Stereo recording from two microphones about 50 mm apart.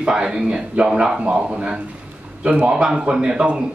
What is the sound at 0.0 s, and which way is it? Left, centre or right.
A man's voice, centre.